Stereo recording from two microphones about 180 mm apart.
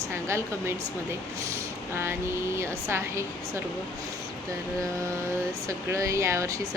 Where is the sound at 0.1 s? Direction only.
15° right (ahead or behind).